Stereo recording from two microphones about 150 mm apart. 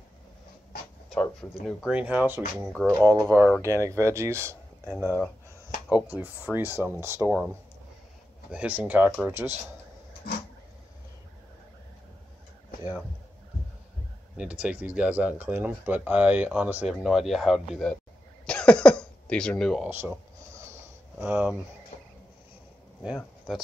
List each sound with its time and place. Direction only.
1.1 s speech: 5° left (ahead or behind)
1.9 s speech: 10° right (ahead or behind)
2.6 s speech: centre (ahead or behind)
3.6 s speech: 20° right (ahead or behind)
5.9 s speech: 10° right (ahead or behind)
8.5 s speech: 10° right (ahead or behind)
14.3 s speech: 5° right (ahead or behind)
19.9 s a sound: 15° right (ahead or behind)
21.2 s speech: 10° right (ahead or behind)
21.9 s a sound: 50° left (ahead or behind)
23.0 s speech: centre (ahead or behind)